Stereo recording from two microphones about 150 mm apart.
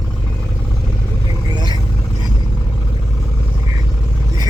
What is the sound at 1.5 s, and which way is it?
Vehicle, 30° right (ahead or behind).